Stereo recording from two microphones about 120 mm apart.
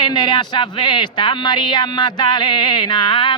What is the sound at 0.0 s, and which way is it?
Speech, 40° left (ahead or behind).